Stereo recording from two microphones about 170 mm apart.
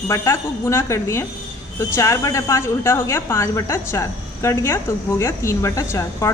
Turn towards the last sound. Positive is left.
turn(degrees=20)  # may be behind; listen again after turning